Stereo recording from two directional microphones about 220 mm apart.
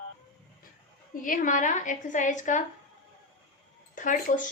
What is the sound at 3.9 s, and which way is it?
Speech, 35° left (ahead or behind).